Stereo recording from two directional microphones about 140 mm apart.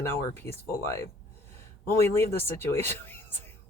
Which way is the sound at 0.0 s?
20° left (ahead or behind).